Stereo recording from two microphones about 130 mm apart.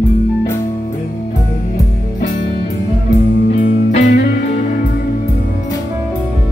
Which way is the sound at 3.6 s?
75° left (ahead or behind).